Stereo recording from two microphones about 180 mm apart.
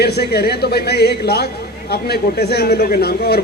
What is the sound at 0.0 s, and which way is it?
A man's voice, 65° left (ahead or behind).